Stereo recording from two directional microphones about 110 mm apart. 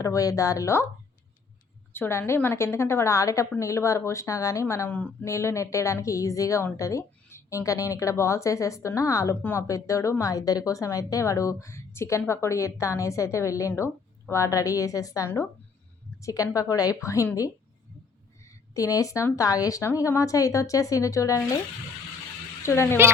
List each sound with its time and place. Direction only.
0.0 s a woman's voice: 30° left (ahead or behind)
1.9 s a woman's voice: 20° left (ahead or behind)
4.9 s speech: 15° left (ahead or behind)
5.2 s a woman's voice: 25° left (ahead or behind)
18.4 s a woman's voice: 30° left (ahead or behind)
22.6 s a woman's voice: 25° left (ahead or behind)